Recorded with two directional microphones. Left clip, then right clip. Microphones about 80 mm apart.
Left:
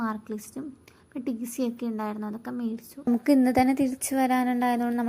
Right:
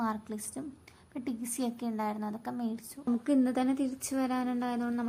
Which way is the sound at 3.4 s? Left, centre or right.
Left.